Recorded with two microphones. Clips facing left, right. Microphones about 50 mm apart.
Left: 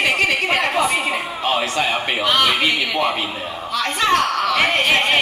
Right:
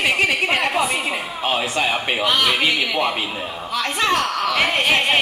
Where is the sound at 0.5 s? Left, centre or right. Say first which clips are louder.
Left 2 dB; centre.